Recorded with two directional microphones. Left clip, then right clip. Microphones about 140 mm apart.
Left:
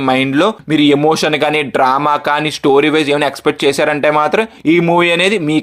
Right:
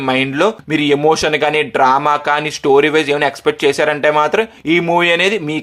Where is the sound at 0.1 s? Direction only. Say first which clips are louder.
Left 1 dB; 30° left (ahead or behind).